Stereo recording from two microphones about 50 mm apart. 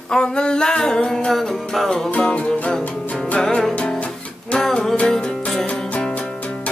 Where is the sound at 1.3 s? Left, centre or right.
Centre.